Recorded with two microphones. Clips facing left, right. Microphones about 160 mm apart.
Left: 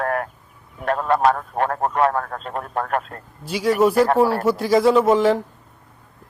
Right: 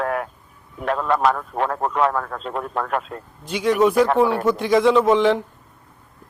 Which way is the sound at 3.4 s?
5° left (ahead or behind).